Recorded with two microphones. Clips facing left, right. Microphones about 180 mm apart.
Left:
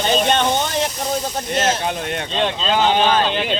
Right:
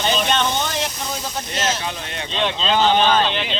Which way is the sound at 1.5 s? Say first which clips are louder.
Left 5 dB; 55° left (ahead or behind).